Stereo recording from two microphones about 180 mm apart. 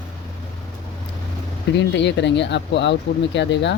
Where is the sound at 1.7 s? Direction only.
75° left (ahead or behind).